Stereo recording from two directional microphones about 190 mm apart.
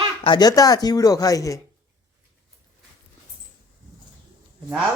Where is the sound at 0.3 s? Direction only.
20° left (ahead or behind).